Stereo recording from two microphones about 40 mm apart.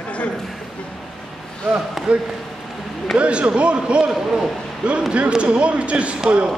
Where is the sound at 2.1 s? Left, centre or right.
Right.